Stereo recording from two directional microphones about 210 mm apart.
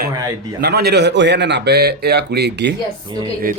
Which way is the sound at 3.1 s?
20° right (ahead or behind).